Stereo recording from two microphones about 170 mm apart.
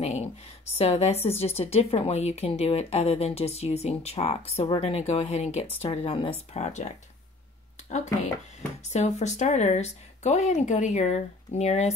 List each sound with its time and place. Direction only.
0.0 s a sound: 40° left (ahead or behind)
0.7 s a woman's voice: 40° left (ahead or behind)
7.9 s a woman's voice: 40° left (ahead or behind)